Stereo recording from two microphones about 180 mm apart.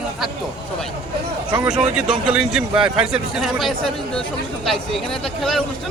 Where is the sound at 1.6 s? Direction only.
5° right (ahead or behind).